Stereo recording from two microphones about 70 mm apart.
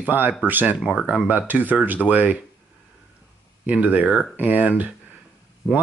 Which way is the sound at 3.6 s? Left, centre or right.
Right.